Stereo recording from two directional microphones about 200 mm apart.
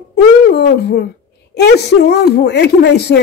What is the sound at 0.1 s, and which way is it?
Speech, 55° left (ahead or behind).